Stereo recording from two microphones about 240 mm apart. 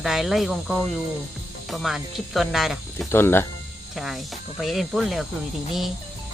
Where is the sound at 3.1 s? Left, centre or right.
Centre.